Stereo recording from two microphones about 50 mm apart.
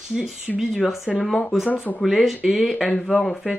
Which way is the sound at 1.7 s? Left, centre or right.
Left.